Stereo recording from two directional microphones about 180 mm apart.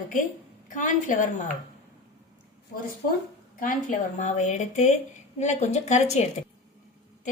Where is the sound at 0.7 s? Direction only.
45° left (ahead or behind).